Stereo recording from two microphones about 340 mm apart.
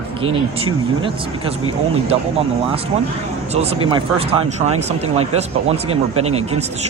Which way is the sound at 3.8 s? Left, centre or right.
Centre.